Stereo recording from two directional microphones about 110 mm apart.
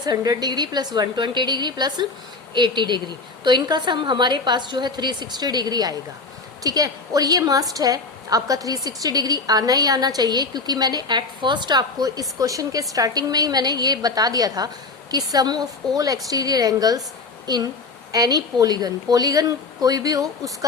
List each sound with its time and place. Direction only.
0.0 s a woman's voice: 35° right (ahead or behind)